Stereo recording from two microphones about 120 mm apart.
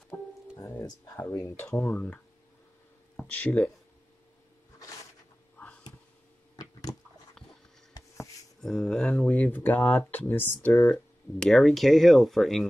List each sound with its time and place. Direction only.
0.6 s speech: 25° left (ahead or behind)
3.2 s speech: 10° left (ahead or behind)
6.5 s a sound: 30° left (ahead or behind)
8.5 s speech: 5° left (ahead or behind)
9.4 s speech: 15° left (ahead or behind)
10.9 s speech: 5° left (ahead or behind)